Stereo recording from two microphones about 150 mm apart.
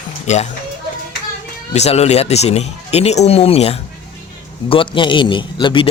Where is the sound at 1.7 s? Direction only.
45° left (ahead or behind).